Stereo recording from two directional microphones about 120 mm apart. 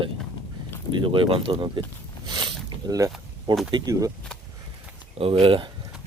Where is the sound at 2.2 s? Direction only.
40° right (ahead or behind).